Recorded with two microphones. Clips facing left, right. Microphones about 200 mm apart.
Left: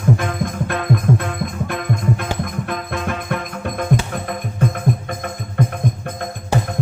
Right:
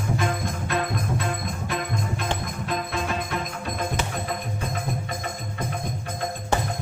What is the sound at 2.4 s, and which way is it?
Music, 55° left (ahead or behind).